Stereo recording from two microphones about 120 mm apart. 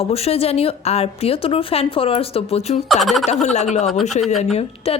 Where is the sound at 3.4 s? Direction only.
75° left (ahead or behind).